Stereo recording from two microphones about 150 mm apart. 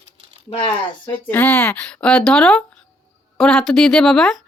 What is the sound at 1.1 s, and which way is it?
A woman's voice, 10° left (ahead or behind).